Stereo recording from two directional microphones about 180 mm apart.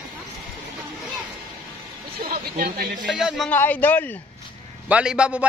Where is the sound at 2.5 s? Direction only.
50° right (ahead or behind).